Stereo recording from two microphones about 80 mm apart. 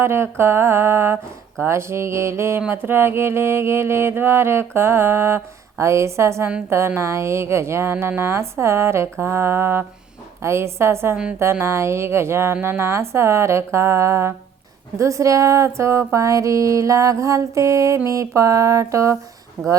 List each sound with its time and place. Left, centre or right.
0.0 s mantra: right